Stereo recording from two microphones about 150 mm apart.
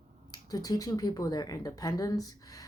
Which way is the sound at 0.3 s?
25° left (ahead or behind).